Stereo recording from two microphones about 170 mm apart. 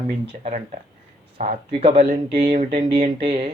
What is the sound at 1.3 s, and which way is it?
Speech, 35° right (ahead or behind).